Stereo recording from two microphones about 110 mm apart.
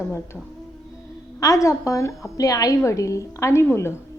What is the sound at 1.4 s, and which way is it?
A woman's voice, 30° left (ahead or behind).